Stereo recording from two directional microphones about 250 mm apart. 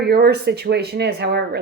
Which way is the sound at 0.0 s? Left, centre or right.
Right.